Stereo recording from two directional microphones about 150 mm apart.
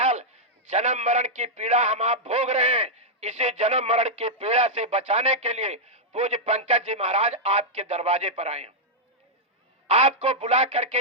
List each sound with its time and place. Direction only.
0.0 s a sound: 50° right (ahead or behind)
0.7 s a man's voice: 50° right (ahead or behind)
9.8 s a man's voice: 45° right (ahead or behind)